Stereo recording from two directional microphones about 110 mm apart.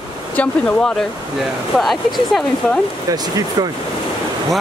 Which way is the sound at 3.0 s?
35° right (ahead or behind).